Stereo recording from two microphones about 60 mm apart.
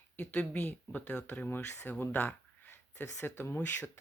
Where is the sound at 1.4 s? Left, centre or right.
Left.